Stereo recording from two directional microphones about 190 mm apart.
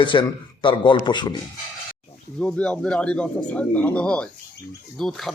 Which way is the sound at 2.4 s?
5° left (ahead or behind).